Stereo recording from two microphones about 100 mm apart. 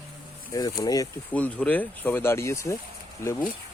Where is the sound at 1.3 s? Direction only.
15° left (ahead or behind).